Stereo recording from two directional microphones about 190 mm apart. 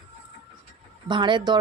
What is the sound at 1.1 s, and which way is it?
Speech, 25° right (ahead or behind).